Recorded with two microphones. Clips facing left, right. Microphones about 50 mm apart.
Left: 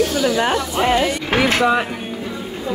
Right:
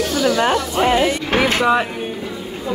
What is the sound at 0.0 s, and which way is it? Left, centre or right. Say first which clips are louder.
Speech: even; centre.